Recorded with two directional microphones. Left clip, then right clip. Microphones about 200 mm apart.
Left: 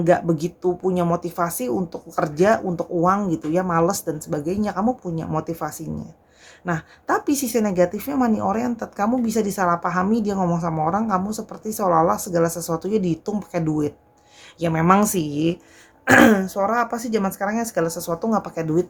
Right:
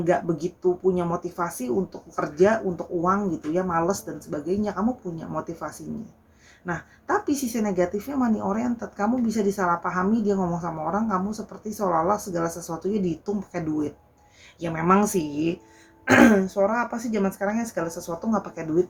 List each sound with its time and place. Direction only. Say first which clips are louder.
0.0 s a woman's voice: left 5 dB; 50° left (ahead or behind)
14.6 s a woman's voice: left 4 dB; 50° left (ahead or behind)
16.0 s a woman's voice: left 3 dB; 45° left (ahead or behind)